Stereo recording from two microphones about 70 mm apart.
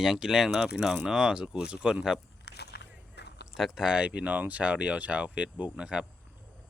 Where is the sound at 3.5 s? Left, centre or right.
Centre.